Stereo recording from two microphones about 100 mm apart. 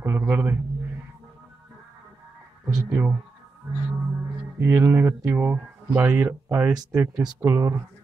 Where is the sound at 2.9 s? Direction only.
15° right (ahead or behind).